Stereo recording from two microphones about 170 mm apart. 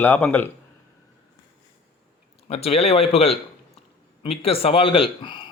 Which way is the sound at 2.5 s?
35° left (ahead or behind).